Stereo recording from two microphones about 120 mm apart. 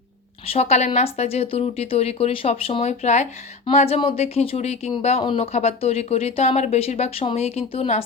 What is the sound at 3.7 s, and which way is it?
Speech, 60° left (ahead or behind).